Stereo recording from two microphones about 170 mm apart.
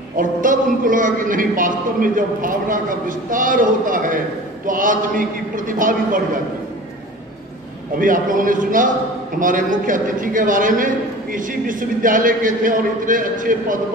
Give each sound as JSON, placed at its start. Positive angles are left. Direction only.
{"t": 0.1, "sound": "a man's voice", "side_deg": -55}
{"t": 8.0, "sound": "a man's voice", "side_deg": -50}